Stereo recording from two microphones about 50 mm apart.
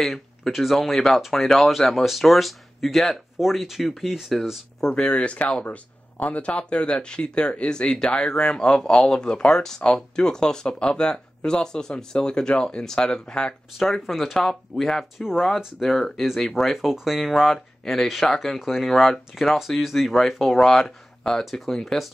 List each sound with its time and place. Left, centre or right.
0.0 s speech: centre
4.7 s speech: centre
13.7 s speech: centre
15.1 s speech: centre